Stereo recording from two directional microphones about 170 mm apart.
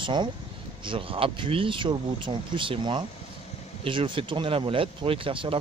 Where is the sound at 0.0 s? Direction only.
25° right (ahead or behind).